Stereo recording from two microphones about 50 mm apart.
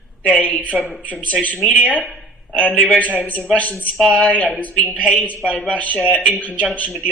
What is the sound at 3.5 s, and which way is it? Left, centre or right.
A woman's voice, left.